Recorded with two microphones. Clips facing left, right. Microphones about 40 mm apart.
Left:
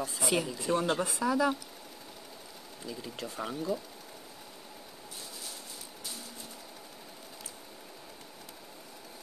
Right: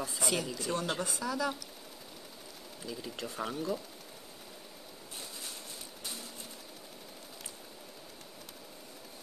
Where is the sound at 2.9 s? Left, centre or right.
Centre.